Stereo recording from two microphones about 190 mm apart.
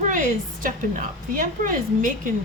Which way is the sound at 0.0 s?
45° right (ahead or behind).